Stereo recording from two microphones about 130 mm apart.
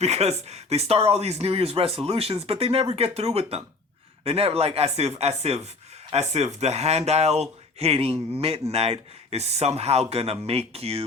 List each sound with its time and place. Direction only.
0.0 s speech: 55° right (ahead or behind)